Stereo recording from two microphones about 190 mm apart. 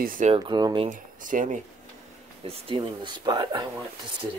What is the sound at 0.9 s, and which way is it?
Speech, 45° right (ahead or behind).